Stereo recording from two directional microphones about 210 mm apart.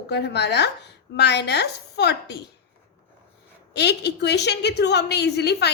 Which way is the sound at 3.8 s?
55° left (ahead or behind).